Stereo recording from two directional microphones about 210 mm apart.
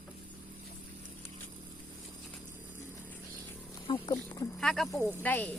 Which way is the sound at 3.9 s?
20° left (ahead or behind).